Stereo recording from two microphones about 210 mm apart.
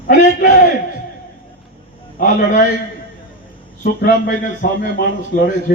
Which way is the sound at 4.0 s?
40° left (ahead or behind).